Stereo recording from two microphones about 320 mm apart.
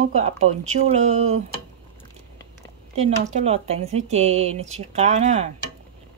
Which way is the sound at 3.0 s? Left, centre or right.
Right.